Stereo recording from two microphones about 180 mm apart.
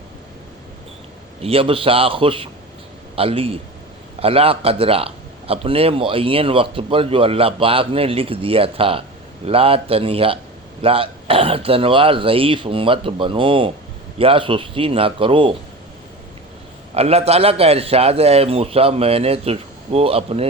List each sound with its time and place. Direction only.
1.4 s speech: 30° right (ahead or behind)
16.9 s speech: 35° right (ahead or behind)